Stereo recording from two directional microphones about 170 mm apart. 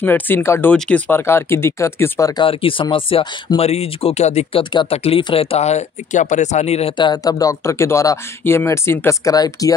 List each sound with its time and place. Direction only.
0.0 s speech: 10° left (ahead or behind)
2.4 s speech: 30° left (ahead or behind)